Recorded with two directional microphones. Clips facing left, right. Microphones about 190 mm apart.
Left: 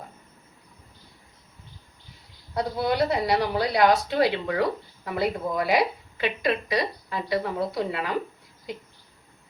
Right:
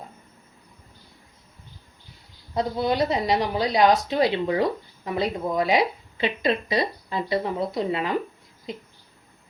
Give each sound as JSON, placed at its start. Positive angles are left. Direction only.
{"t": 2.6, "sound": "a woman's voice", "side_deg": -20}